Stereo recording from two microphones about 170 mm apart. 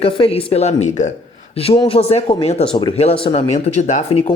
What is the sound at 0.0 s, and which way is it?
Speech, 30° left (ahead or behind).